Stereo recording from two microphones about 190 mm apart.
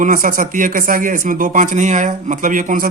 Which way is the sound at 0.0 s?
45° right (ahead or behind).